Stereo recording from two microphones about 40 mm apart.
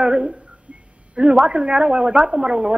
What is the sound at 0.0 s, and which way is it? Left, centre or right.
A woman's voice, right.